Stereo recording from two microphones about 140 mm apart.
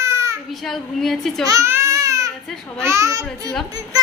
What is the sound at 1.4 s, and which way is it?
Baby cry, 25° right (ahead or behind).